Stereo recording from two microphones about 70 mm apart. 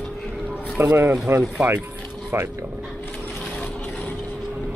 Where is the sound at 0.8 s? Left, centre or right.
Right.